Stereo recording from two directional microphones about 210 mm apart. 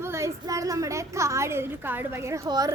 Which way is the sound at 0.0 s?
15° right (ahead or behind).